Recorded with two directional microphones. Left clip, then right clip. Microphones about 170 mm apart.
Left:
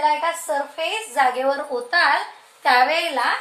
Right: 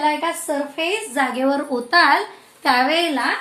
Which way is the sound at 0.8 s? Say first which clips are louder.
Left 1 dB; 15° left (ahead or behind).